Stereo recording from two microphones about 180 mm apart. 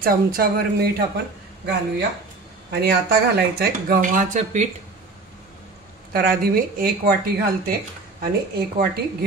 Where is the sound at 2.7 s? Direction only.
65° right (ahead or behind); by 4.6 s 45° right (ahead or behind).